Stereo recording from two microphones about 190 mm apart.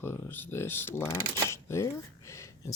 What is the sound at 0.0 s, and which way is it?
Speech, 10° left (ahead or behind).